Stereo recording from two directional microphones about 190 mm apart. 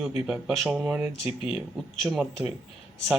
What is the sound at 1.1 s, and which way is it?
Speech, 30° left (ahead or behind).